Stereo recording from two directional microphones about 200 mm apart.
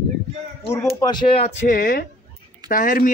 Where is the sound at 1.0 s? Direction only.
20° left (ahead or behind).